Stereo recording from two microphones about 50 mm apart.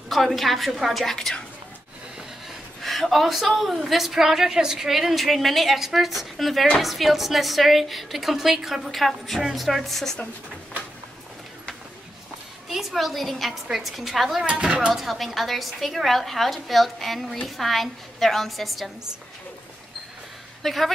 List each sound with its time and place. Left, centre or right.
0.1 s a woman's voice: centre
1.1 s a woman's voice: centre
2.8 s a woman's voice: centre
12.6 s a woman's voice: centre
14.4 s speech: right
15.0 s a woman's voice: centre
20.6 s a woman's voice: centre